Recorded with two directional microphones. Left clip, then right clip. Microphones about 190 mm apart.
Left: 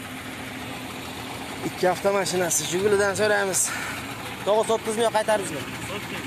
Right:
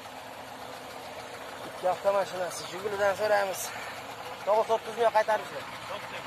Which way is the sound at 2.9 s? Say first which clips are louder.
Left 2 dB; 5° left (ahead or behind).